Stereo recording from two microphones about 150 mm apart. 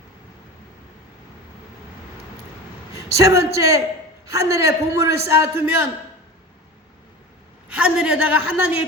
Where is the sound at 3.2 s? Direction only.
20° right (ahead or behind).